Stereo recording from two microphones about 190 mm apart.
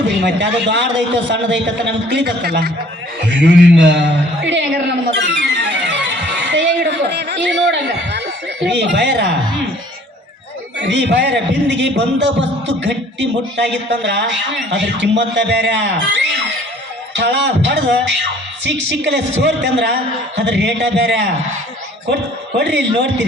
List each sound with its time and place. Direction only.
0.2 s a man's voice: 65° right (ahead or behind)
3.2 s a sound: 65° right (ahead or behind)
8.7 s speech: 65° right (ahead or behind)
10.8 s a man's voice: 65° right (ahead or behind)
22.5 s speech: 65° right (ahead or behind)